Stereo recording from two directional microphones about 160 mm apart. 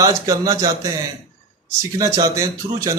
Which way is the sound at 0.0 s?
20° right (ahead or behind).